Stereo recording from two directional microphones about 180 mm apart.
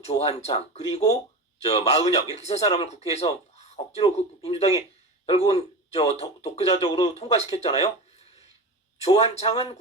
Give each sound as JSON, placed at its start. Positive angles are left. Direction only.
{"t": 0.0, "sound": "speech", "side_deg": 35}
{"t": 9.0, "sound": "speech", "side_deg": 35}